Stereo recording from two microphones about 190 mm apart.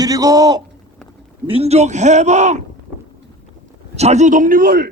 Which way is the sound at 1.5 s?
30° right (ahead or behind).